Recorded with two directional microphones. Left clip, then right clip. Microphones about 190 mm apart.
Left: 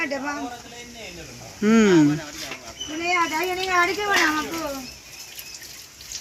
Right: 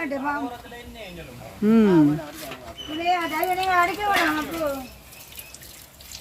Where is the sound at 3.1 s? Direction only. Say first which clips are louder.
Left 4 dB; 60° right (ahead or behind).